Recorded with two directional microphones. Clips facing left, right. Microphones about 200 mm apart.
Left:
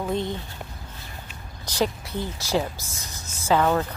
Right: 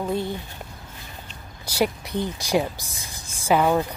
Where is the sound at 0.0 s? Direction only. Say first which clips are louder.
Right 1 dB; 5° right (ahead or behind).